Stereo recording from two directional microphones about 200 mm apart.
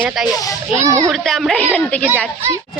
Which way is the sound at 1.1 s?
Centre (ahead or behind).